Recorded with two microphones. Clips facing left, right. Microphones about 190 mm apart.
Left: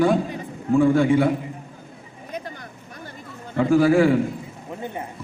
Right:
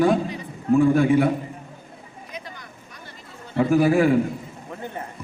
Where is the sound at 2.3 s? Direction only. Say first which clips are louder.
Left 6 dB; 50° left (ahead or behind).